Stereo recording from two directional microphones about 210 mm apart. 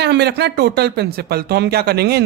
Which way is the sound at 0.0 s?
50° right (ahead or behind).